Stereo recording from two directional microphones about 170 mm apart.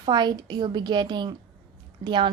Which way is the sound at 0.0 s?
25° right (ahead or behind).